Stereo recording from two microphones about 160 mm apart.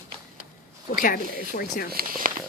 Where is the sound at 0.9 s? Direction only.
60° left (ahead or behind).